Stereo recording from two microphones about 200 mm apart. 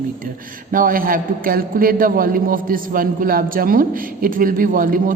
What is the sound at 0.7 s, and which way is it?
A man's voice, 45° right (ahead or behind).